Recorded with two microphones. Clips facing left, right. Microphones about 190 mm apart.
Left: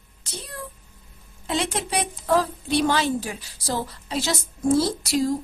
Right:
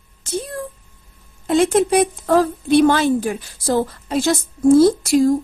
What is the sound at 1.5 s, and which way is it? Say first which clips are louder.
A woman's voice: right 11 dB; 50° right (ahead or behind).